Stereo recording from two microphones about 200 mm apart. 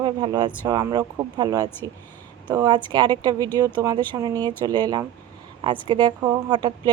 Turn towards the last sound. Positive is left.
turn(degrees=-20)  # may be behind; listen again after turning